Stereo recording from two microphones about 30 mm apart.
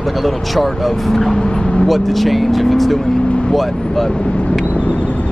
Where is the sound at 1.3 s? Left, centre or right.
Left.